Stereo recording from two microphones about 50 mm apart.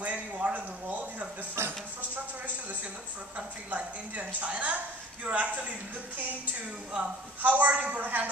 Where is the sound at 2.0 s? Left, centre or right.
Right.